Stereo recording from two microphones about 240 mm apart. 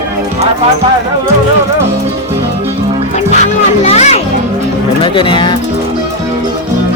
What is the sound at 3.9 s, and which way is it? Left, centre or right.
Music, left.